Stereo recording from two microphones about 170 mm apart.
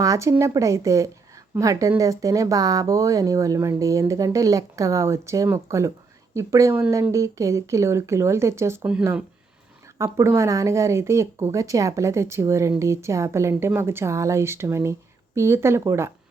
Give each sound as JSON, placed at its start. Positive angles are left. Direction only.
{"t": 0.0, "sound": "speech", "side_deg": -20}